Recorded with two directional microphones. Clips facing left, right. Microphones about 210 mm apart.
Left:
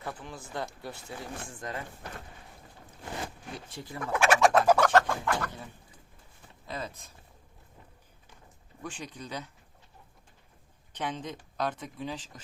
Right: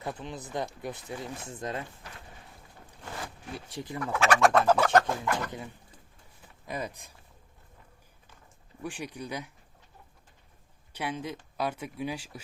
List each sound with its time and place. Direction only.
0.0 s speech: 20° right (ahead or behind)
3.7 s speech: 15° right (ahead or behind)
4.1 s speech: 10° left (ahead or behind)
4.4 s fowl: centre (ahead or behind)
4.9 s speech: 15° right (ahead or behind)
6.7 s speech: 15° right (ahead or behind)
8.8 s speech: 10° right (ahead or behind)
10.9 s speech: 10° right (ahead or behind)